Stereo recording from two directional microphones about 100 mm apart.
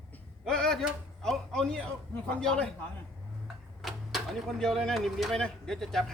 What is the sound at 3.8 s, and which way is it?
Speech, centre (ahead or behind).